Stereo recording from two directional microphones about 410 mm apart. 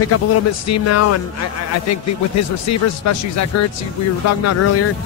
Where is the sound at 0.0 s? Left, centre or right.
Left.